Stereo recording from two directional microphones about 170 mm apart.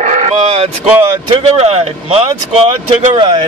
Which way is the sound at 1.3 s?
35° right (ahead or behind).